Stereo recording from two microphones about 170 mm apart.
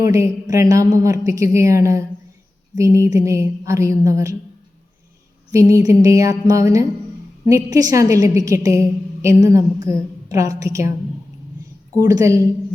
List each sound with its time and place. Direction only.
0.0 s a woman's voice: 20° right (ahead or behind)
5.5 s a woman's voice: 20° right (ahead or behind)
11.9 s a woman's voice: 20° right (ahead or behind)